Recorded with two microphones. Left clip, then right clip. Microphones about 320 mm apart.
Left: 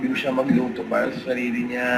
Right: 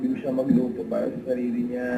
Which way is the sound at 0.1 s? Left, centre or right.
Centre.